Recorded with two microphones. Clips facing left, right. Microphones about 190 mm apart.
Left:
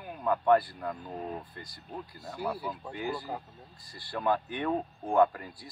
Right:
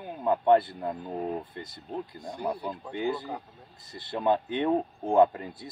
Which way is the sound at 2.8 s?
20° right (ahead or behind).